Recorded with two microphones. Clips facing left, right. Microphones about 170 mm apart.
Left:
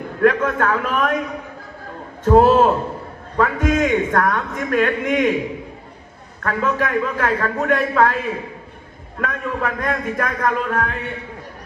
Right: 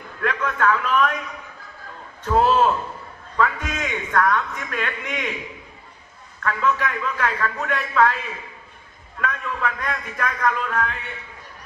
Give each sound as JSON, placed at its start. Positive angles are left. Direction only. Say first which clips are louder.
{"t": 0.1, "sound": "a man's voice", "louder": "left 9 dB", "side_deg": 45}
{"t": 6.4, "sound": "a man's voice", "louder": "left 2 dB", "side_deg": 45}